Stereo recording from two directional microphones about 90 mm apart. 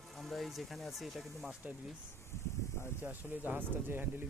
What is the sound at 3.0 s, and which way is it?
Speech, 20° right (ahead or behind).